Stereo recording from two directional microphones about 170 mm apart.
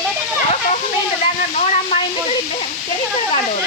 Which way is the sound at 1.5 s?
40° left (ahead or behind).